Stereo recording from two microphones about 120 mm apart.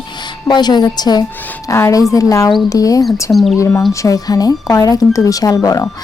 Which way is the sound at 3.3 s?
Centre (ahead or behind).